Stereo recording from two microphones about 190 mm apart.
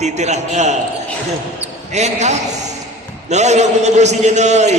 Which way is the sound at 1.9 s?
35° right (ahead or behind).